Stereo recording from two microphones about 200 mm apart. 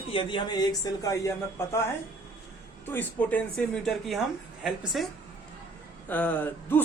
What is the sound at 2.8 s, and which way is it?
A woman's voice, 10° left (ahead or behind).